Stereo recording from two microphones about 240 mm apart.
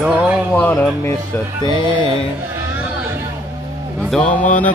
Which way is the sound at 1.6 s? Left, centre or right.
Centre.